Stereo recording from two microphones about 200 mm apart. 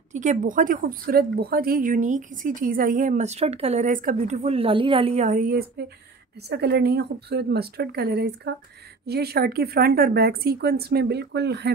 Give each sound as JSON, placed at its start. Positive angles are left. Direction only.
{"t": 0.1, "sound": "a woman's voice", "side_deg": -40}